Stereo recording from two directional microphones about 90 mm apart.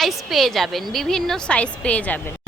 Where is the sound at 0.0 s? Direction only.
Centre (ahead or behind).